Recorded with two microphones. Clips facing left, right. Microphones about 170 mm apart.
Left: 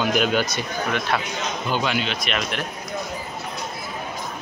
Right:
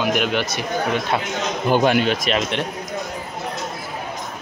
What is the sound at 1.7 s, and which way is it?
Speech, 50° right (ahead or behind).